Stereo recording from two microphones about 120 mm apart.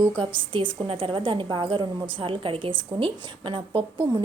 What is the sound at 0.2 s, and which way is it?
A woman's voice, 45° right (ahead or behind).